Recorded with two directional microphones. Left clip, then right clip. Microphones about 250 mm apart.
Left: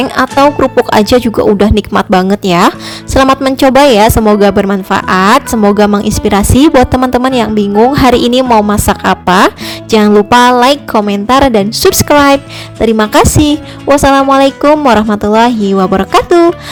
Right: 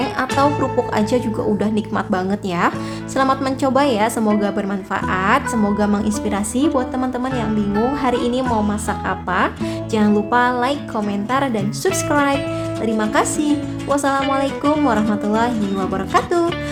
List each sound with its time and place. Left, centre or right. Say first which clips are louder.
0.2 s speech: left 11 dB; left